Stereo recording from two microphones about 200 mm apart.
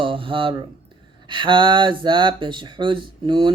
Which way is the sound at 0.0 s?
25° right (ahead or behind).